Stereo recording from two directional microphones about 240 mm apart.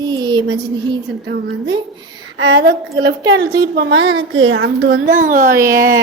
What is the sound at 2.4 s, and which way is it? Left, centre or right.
A woman's voice, right.